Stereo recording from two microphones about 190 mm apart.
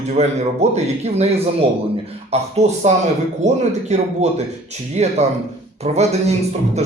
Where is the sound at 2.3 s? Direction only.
35° right (ahead or behind).